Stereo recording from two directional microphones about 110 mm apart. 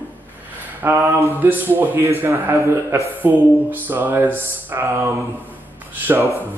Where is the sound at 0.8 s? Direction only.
20° right (ahead or behind).